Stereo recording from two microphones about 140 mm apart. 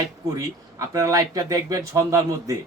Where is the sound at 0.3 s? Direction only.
25° right (ahead or behind).